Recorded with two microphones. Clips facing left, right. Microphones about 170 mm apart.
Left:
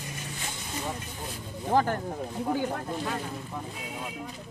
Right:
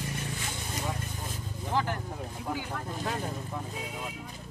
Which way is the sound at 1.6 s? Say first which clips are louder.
Left 6 dB; 45° left (ahead or behind).